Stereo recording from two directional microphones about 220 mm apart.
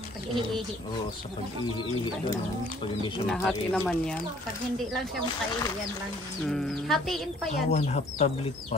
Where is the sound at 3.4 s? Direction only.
Centre (ahead or behind).